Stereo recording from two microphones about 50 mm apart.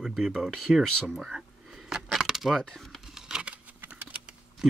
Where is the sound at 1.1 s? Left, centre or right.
Centre.